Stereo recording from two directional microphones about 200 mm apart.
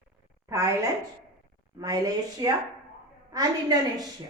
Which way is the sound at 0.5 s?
15° right (ahead or behind).